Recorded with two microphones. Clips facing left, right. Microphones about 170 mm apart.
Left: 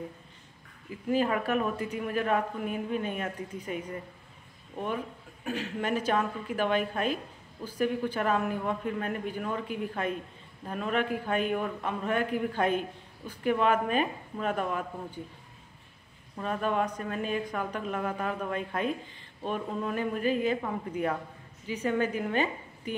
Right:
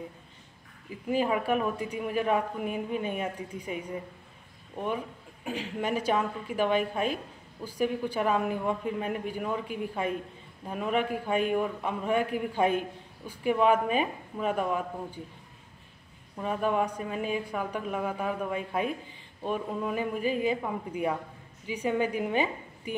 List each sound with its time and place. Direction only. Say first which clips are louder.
1.0 s speech: even; 10° right (ahead or behind)
16.3 s speech: right 1 dB; 10° right (ahead or behind)